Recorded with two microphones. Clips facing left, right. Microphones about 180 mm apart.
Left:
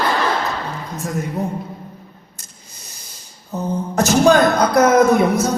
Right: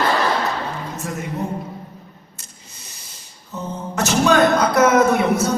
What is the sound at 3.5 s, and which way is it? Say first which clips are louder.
Speech: left 5 dB; 35° left (ahead or behind).